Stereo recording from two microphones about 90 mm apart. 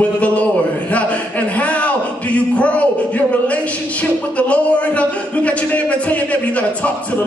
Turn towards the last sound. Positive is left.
turn(degrees=15)  # may be behind; listen again after turning